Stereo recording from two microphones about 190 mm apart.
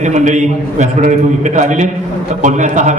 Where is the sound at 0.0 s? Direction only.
40° right (ahead or behind).